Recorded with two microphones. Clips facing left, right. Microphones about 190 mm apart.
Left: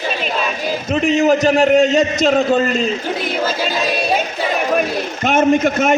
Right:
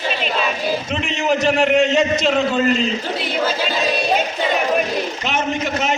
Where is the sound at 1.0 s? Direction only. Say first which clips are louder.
Left 6 dB; 45° left (ahead or behind).